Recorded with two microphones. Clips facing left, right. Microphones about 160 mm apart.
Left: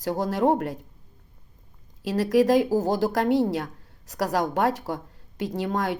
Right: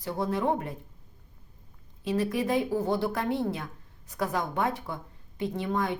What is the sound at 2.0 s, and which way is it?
Speech, 90° left.